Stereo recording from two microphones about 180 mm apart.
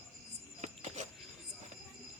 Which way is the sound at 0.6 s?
40° right (ahead or behind).